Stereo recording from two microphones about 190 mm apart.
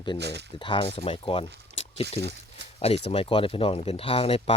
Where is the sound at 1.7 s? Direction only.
30° left (ahead or behind).